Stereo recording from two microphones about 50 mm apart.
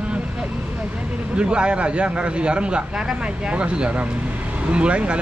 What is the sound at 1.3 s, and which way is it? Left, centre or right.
A man's voice, right.